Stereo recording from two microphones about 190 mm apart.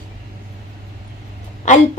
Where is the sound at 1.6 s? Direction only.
40° left (ahead or behind).